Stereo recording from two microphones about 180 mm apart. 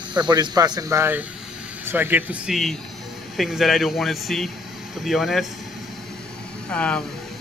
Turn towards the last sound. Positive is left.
turn(degrees=5)  # may be behind; listen again after turning